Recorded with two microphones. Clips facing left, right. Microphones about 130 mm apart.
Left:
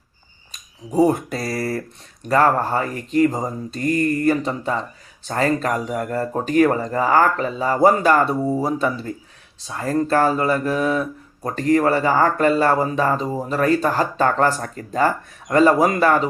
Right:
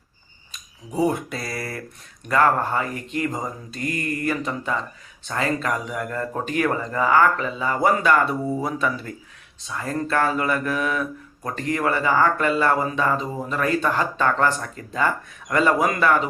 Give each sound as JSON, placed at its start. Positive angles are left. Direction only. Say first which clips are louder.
{"t": 0.5, "sound": "speech", "louder": "left 7 dB", "side_deg": 40}